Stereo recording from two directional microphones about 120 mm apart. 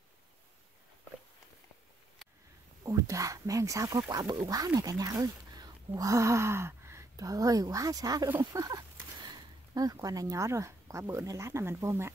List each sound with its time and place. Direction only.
2.8 s speech: 25° right (ahead or behind)
8.5 s a sound: 35° right (ahead or behind)
10.0 s speech: 30° right (ahead or behind)